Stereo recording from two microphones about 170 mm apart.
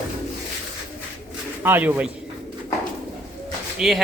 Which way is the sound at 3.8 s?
Centre (ahead or behind).